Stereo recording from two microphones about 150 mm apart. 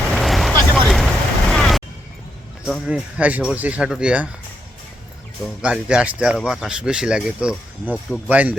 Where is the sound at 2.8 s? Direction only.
10° right (ahead or behind).